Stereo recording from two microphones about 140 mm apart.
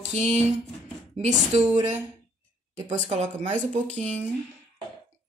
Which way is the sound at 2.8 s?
60° right (ahead or behind).